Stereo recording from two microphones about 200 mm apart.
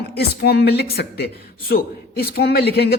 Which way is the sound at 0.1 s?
50° left (ahead or behind).